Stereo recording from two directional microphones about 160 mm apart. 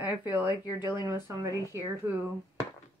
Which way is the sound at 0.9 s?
15° right (ahead or behind).